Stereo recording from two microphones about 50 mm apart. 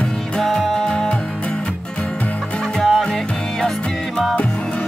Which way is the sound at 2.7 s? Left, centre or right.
Centre.